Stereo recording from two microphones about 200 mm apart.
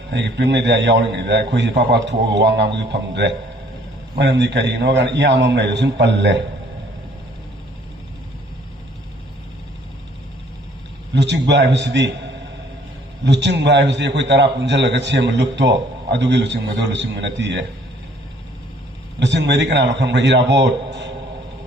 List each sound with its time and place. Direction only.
0.1 s a man's voice: 60° right (ahead or behind)
11.1 s a man's voice: 60° right (ahead or behind)
19.2 s a man's voice: 60° right (ahead or behind)